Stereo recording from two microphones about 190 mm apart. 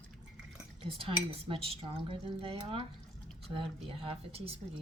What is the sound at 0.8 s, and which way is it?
Speech, 30° right (ahead or behind).